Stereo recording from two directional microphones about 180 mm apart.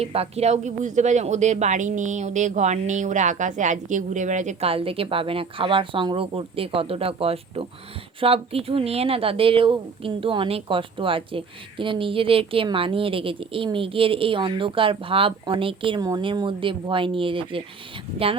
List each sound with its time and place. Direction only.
0.0 s a woman's voice: 35° right (ahead or behind)